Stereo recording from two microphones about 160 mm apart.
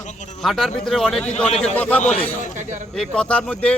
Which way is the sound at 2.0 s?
50° left (ahead or behind).